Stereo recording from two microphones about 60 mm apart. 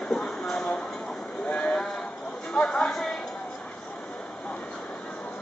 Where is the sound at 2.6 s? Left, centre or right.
Centre.